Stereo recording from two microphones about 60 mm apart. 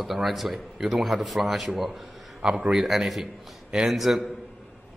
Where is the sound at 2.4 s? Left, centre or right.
Centre.